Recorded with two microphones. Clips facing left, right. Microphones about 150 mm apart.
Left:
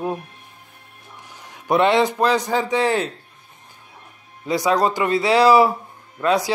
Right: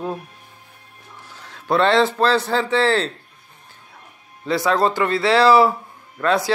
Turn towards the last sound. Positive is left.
turn(degrees=15)  # may be behind; listen again after turning